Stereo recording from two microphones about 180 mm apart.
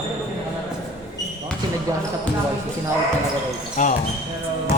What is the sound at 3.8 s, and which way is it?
Speech, 45° left (ahead or behind).